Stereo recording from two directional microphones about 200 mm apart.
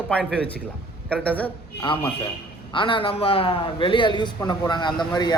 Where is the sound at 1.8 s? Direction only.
25° left (ahead or behind).